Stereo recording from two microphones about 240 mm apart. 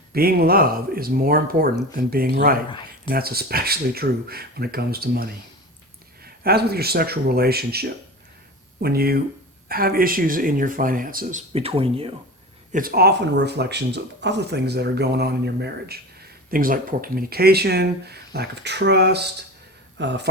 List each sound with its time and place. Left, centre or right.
0.1 s speech: right
12.7 s speech: right